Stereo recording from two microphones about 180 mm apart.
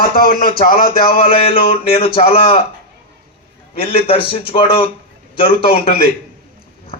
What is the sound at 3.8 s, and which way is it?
A man's voice, 30° left (ahead or behind).